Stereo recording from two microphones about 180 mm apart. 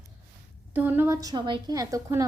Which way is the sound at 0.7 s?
10° right (ahead or behind).